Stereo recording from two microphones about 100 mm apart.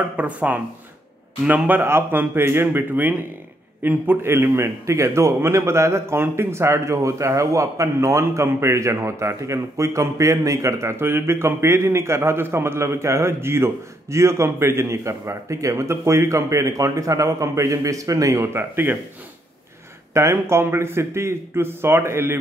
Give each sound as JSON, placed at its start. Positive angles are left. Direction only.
{"t": 0.2, "sound": "a man's voice", "side_deg": -15}
{"t": 20.2, "sound": "a man's voice", "side_deg": -30}